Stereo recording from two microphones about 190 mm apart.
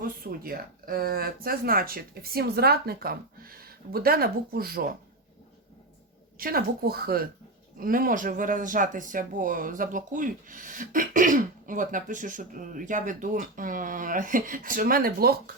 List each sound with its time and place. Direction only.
0.0 s speech: 50° right (ahead or behind)
6.4 s speech: 55° right (ahead or behind)